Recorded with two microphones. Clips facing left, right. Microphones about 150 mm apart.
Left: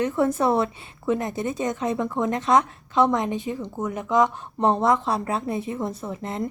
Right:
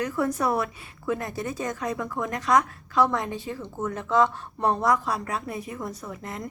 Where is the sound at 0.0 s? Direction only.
25° left (ahead or behind).